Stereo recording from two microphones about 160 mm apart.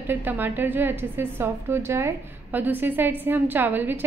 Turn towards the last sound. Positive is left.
turn(degrees=-10)  # may be behind; listen again after turning